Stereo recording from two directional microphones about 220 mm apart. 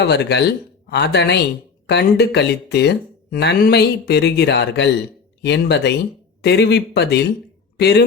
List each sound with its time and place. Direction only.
0.0 s speech: 50° left (ahead or behind)